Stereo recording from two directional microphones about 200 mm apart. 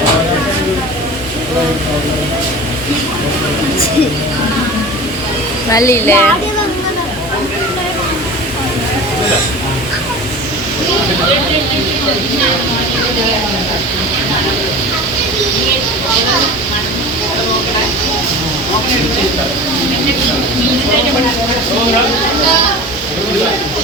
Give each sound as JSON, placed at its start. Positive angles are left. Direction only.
{"t": 5.7, "sound": "speech", "side_deg": 15}